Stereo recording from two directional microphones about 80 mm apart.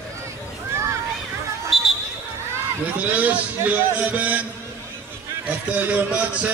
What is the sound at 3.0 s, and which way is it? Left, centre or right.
A man's voice, centre.